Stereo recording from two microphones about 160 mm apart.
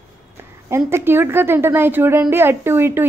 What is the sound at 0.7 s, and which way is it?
A woman's voice, 15° right (ahead or behind).